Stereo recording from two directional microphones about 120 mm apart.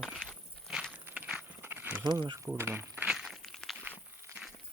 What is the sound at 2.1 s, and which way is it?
Speech, 40° right (ahead or behind).